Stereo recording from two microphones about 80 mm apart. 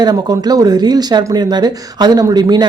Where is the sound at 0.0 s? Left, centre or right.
Right.